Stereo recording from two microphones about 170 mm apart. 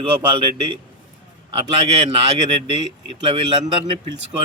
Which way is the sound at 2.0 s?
35° right (ahead or behind).